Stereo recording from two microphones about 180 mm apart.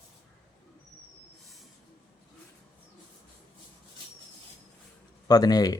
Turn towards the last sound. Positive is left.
turn(degrees=20)  # may be behind; listen again after turning